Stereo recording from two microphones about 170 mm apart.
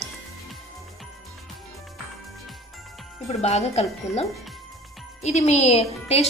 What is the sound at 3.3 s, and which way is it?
A woman's voice, 40° left (ahead or behind).